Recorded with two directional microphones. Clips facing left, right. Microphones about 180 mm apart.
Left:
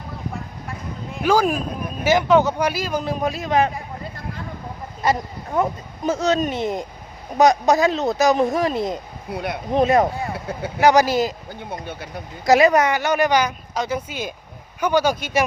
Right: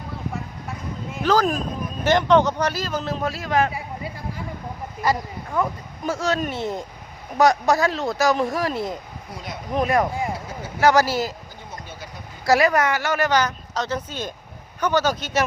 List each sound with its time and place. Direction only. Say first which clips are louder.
1.2 s speech: left 2 dB; 10° left (ahead or behind)
3.7 s a sound: even; 10° right (ahead or behind)
5.0 s speech: left 2 dB; 25° left (ahead or behind)
9.3 s speech: left 9 dB; 60° left (ahead or behind)
9.7 s speech: left 4 dB; 25° left (ahead or behind)
10.3 s speech: left 5 dB; 60° left (ahead or behind)
10.8 s speech: left 2 dB; 15° left (ahead or behind)
11.7 s speech: left 7 dB; 60° left (ahead or behind)
12.5 s speech: left 3 dB; 20° left (ahead or behind)